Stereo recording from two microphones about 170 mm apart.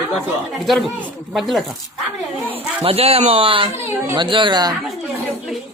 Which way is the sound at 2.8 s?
35° right (ahead or behind).